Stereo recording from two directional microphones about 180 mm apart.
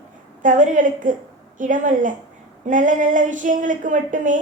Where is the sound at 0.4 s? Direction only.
45° right (ahead or behind).